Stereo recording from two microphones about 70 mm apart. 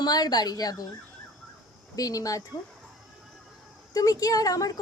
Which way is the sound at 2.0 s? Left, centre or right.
Left.